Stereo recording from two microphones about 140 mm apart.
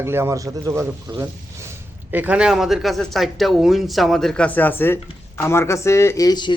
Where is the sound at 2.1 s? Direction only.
10° right (ahead or behind).